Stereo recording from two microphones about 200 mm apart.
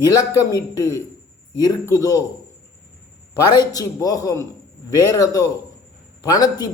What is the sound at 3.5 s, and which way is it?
Speech, 20° left (ahead or behind).